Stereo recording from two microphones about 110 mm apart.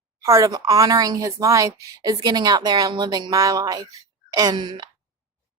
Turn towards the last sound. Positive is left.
turn(degrees=-40)  # may be behind; listen again after turning